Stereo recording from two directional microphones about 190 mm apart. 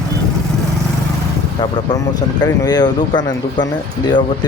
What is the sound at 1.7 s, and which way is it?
Speech, 20° left (ahead or behind).